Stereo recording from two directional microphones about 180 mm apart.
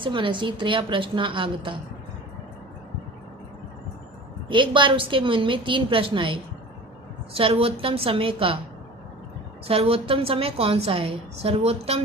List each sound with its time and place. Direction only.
0.0 s a woman's voice: 25° right (ahead or behind)
4.4 s a woman's voice: 25° right (ahead or behind)
9.6 s a woman's voice: 30° right (ahead or behind)